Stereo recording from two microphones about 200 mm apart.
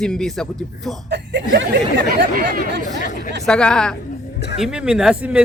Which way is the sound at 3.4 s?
5° left (ahead or behind).